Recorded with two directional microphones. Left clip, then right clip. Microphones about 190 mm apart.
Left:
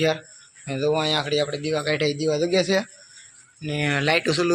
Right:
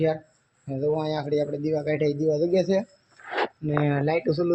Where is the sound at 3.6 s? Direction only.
30° right (ahead or behind).